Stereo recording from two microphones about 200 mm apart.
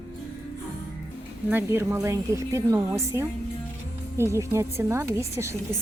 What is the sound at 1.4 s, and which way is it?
Speech, 10° right (ahead or behind).